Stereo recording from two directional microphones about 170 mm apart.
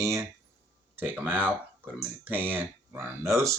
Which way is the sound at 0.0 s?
20° right (ahead or behind).